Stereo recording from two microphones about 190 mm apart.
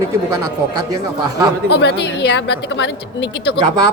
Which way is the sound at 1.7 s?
65° left (ahead or behind).